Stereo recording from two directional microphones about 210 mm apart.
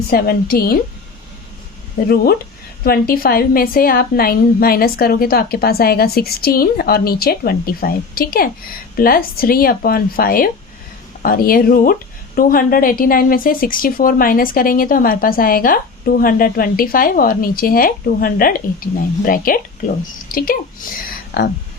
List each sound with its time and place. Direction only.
0.1 s speech: 45° left (ahead or behind)
2.8 s speech: 45° left (ahead or behind)